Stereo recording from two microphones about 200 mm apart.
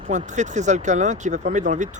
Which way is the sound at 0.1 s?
35° right (ahead or behind).